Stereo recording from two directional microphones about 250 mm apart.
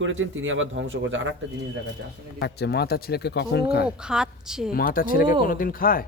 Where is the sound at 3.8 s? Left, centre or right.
Centre.